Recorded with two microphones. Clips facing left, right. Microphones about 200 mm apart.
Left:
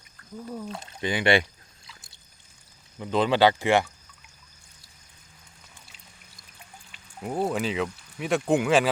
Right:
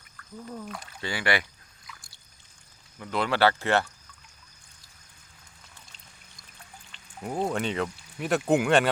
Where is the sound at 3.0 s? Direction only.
20° left (ahead or behind).